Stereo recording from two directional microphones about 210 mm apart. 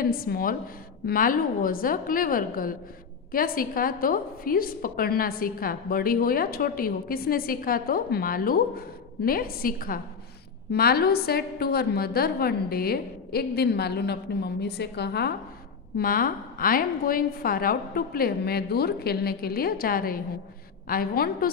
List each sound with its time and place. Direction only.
0.0 s a woman's voice: 45° left (ahead or behind)